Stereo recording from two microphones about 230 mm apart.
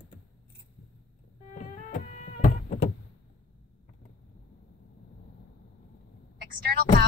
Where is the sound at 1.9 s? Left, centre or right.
Left.